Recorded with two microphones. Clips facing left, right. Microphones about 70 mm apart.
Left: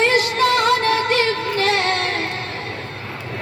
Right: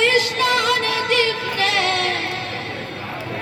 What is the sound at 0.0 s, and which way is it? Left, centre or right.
Music, left.